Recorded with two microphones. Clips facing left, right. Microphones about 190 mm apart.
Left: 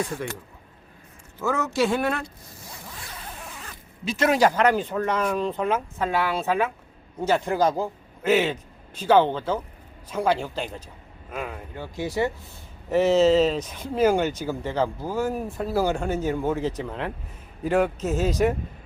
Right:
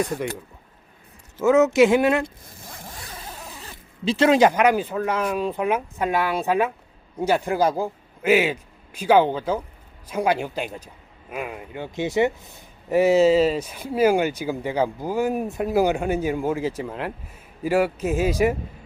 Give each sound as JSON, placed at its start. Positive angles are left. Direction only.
{"t": 1.4, "sound": "speech", "side_deg": -20}
{"t": 2.2, "sound": "zipper", "side_deg": -50}
{"t": 3.6, "sound": "a man's voice", "side_deg": -30}
{"t": 12.9, "sound": "speech", "side_deg": -10}